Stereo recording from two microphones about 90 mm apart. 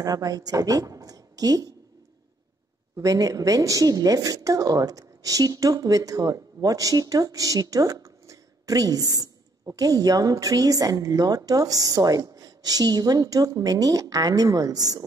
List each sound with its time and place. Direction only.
0.0 s a woman's voice: 40° right (ahead or behind)
3.0 s a woman's voice: 40° right (ahead or behind)